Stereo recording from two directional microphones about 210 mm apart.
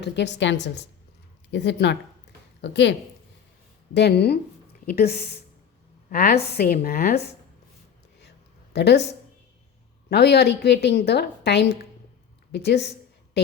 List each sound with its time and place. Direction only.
0.0 s a woman's voice: 55° left (ahead or behind)
3.9 s a woman's voice: 50° left (ahead or behind)
8.7 s speech: 50° left (ahead or behind)
10.1 s a woman's voice: 50° left (ahead or behind)